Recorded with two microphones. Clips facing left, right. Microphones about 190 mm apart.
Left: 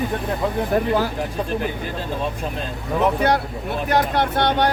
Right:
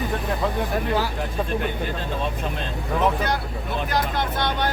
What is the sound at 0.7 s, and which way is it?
Speech, 45° left (ahead or behind).